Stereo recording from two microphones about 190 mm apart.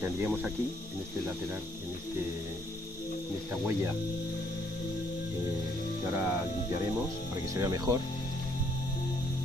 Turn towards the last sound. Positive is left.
turn(degrees=-20)  # may be behind; listen again after turning